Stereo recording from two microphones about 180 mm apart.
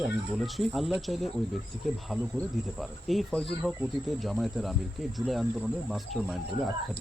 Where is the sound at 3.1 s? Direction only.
Centre (ahead or behind).